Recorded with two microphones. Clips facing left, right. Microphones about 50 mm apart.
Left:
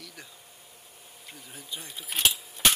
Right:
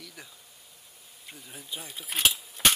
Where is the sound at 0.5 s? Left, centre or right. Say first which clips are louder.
Left 3 dB; left.